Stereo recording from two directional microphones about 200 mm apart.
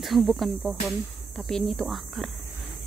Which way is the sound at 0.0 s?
Centre (ahead or behind).